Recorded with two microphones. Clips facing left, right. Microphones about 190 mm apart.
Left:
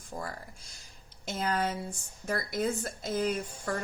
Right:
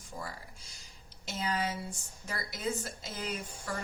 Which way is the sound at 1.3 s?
50° left (ahead or behind).